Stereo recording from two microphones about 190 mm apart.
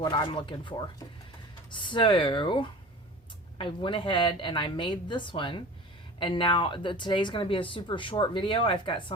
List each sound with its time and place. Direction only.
0.0 s speech: 25° left (ahead or behind)